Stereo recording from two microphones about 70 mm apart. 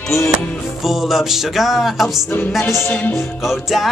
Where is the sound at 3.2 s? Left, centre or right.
Centre.